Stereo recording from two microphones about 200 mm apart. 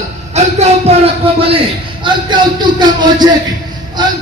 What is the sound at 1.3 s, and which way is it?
Speech, 30° right (ahead or behind).